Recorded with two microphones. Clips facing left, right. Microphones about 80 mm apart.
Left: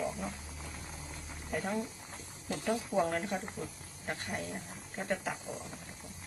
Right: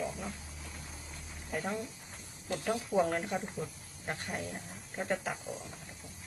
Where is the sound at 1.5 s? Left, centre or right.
Centre.